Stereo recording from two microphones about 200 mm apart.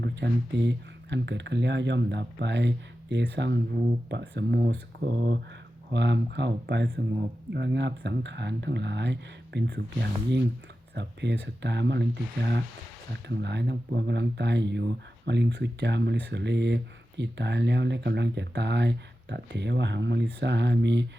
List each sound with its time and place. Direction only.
0.0 s speech: 60° right (ahead or behind)
13.2 s speech: 60° right (ahead or behind)